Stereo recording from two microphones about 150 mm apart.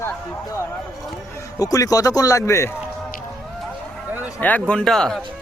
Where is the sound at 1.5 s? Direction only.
25° left (ahead or behind).